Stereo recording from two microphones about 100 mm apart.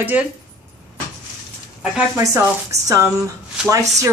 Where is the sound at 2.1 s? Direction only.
30° right (ahead or behind).